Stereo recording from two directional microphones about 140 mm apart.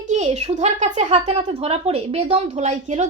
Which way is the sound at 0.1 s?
50° right (ahead or behind).